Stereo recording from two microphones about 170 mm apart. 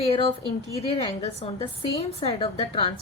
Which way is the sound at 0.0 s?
35° left (ahead or behind).